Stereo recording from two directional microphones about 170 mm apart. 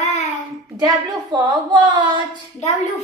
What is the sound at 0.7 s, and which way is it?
A woman's voice, 20° right (ahead or behind).